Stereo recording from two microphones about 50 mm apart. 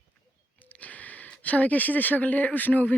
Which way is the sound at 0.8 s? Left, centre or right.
Left.